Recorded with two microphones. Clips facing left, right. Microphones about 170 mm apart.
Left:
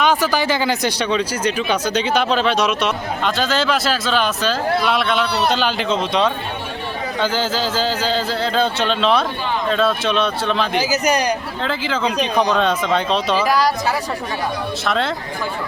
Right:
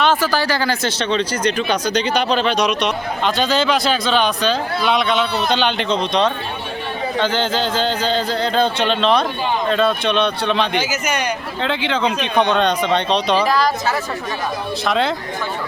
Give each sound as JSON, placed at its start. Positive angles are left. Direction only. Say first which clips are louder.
{"t": 0.0, "sound": "speech", "louder": "even", "side_deg": 15}
{"t": 10.8, "sound": "a man's voice", "louder": "left 3 dB", "side_deg": 35}
{"t": 11.6, "sound": "speech", "louder": "right 3 dB", "side_deg": 0}
{"t": 14.8, "sound": "speech", "louder": "right 2 dB", "side_deg": 0}